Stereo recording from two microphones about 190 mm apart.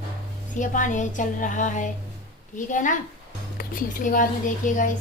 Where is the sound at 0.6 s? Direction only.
40° left (ahead or behind).